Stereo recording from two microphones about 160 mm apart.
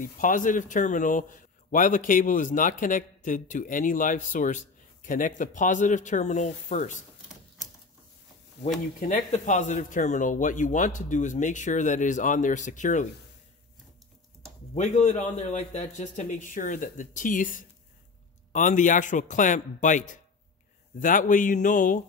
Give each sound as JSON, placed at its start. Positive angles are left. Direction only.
{"t": 0.0, "sound": "a man's voice", "side_deg": 55}
{"t": 8.6, "sound": "speech", "side_deg": 90}
{"t": 9.0, "sound": "speech", "side_deg": 45}
{"t": 14.8, "sound": "a man's voice", "side_deg": 45}